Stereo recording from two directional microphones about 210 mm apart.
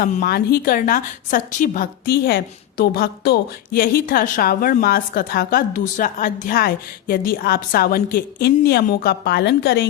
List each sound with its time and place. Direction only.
0.0 s a woman's voice: 45° left (ahead or behind)